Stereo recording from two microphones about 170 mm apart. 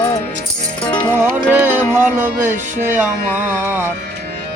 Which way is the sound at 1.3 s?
10° right (ahead or behind).